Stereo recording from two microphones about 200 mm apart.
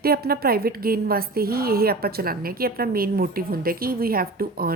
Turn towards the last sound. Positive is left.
turn(degrees=-45)  # may be behind; listen again after turning